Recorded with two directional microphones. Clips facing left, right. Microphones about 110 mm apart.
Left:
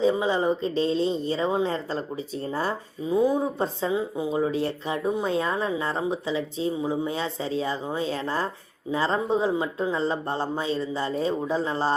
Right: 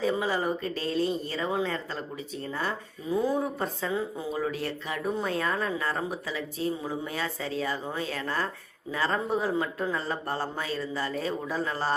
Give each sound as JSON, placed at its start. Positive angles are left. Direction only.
{"t": 0.0, "sound": "a man's voice", "side_deg": 20}
{"t": 3.1, "sound": "speech", "side_deg": 15}
{"t": 3.6, "sound": "a man's voice", "side_deg": 30}